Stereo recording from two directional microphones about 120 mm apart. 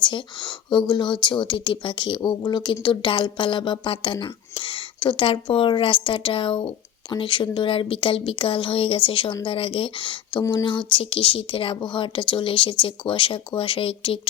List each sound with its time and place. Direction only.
0.0 s speech: 40° left (ahead or behind)